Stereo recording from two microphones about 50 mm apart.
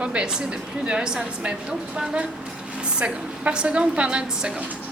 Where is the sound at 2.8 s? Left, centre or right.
Centre.